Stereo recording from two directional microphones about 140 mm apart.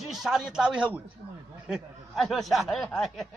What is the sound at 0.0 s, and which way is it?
Speech, centre (ahead or behind).